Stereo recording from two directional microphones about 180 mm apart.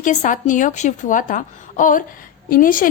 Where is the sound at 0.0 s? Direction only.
45° left (ahead or behind).